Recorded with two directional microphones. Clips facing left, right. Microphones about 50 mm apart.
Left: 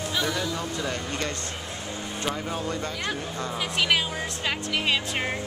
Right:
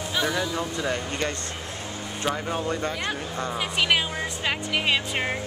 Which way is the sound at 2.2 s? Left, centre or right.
Centre.